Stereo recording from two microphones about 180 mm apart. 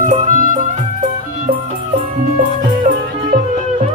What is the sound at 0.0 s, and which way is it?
Music, 45° right (ahead or behind).